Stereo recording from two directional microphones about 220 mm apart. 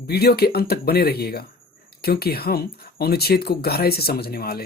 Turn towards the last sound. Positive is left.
turn(degrees=45)  # may be behind; listen again after turning